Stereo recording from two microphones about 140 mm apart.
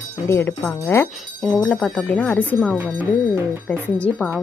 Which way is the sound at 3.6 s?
10° left (ahead or behind).